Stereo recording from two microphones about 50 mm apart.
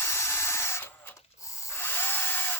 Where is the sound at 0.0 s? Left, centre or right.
Left.